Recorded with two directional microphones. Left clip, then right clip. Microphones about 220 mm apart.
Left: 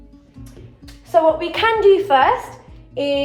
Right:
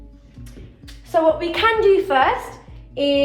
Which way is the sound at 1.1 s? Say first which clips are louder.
Left 2 dB; 35° left (ahead or behind).